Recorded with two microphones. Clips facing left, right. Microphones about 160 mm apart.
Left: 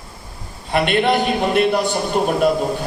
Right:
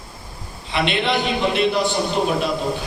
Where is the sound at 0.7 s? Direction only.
50° left (ahead or behind).